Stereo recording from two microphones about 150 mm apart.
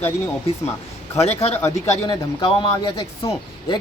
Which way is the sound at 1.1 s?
45° left (ahead or behind).